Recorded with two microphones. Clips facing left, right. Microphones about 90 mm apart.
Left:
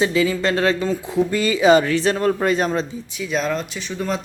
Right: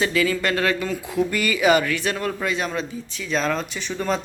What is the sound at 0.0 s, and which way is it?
Speech, 20° left (ahead or behind).